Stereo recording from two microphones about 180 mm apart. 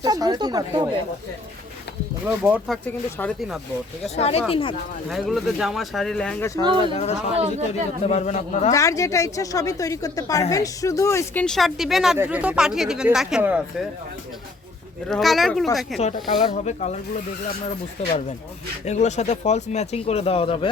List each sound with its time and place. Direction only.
0.0 s speech: 20° right (ahead or behind)
2.2 s speech: 5° right (ahead or behind)
2.8 s speech: 10° left (ahead or behind)
4.0 s speech: 35° left (ahead or behind)
5.0 s speech: centre (ahead or behind)
6.8 s speech: 35° left (ahead or behind)
8.7 s speech: 15° left (ahead or behind)
11.4 s speech: centre (ahead or behind)
15.1 s speech: centre (ahead or behind)
16.0 s speech: 40° left (ahead or behind)
18.9 s speech: 40° left (ahead or behind)